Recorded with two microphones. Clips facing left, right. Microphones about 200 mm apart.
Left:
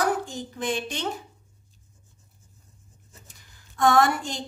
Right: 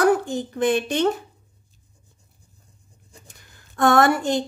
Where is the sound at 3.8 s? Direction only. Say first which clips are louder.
Right 3 dB; 65° right (ahead or behind).